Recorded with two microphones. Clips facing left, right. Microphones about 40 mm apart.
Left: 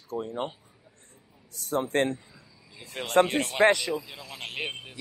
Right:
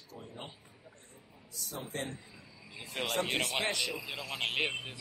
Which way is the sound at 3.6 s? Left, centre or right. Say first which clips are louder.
Left 14 dB; left.